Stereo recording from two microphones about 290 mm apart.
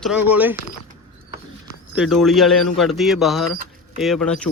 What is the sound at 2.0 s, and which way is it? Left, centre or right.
Speech, centre.